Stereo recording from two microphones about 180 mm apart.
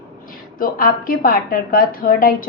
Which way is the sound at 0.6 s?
50° left (ahead or behind).